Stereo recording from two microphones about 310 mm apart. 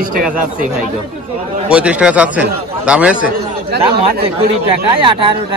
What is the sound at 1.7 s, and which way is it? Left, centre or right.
Speech, centre.